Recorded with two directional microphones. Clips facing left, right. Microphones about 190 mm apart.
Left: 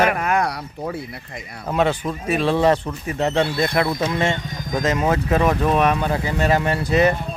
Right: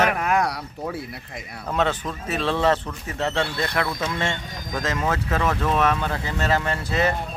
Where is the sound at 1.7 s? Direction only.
10° left (ahead or behind).